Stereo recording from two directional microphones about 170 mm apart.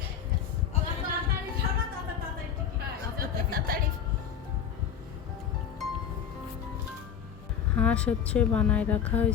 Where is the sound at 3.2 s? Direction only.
60° right (ahead or behind).